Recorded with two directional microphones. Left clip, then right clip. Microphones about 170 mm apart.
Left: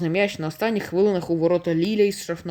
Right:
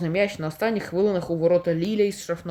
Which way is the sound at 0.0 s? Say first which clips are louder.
Left 1 dB; 20° left (ahead or behind).